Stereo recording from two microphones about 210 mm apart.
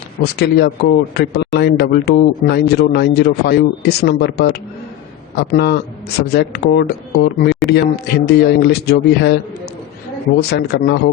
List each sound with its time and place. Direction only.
0.3 s speech: 50° left (ahead or behind)
10.5 s speech: 50° left (ahead or behind)